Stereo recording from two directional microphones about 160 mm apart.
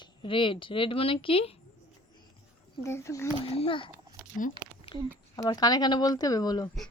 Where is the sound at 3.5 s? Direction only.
35° left (ahead or behind).